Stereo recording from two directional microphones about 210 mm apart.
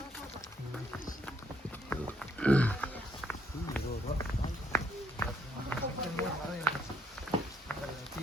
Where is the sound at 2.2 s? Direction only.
5° left (ahead or behind).